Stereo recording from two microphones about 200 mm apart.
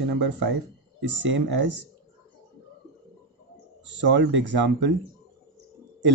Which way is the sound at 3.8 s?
65° right (ahead or behind).